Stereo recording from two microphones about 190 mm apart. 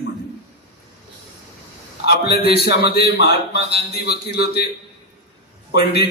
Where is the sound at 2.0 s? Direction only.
60° left (ahead or behind).